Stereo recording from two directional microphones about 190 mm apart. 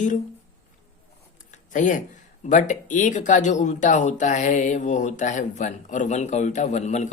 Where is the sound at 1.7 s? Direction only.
40° left (ahead or behind).